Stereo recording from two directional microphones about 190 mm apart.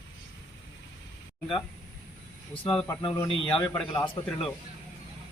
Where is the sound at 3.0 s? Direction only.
25° left (ahead or behind).